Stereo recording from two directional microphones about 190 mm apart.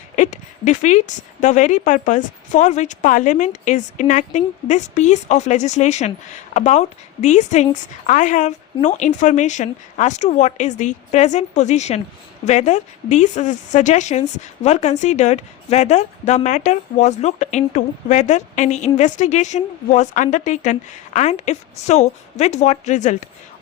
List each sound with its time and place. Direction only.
0.2 s speech: 40° left (ahead or behind)